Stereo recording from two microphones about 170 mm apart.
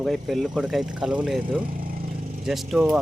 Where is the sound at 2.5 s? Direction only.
5° right (ahead or behind).